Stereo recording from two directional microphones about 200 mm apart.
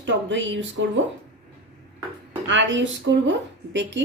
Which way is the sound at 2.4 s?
65° right (ahead or behind).